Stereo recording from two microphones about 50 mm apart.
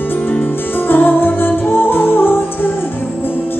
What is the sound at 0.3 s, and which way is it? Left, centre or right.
Music, left.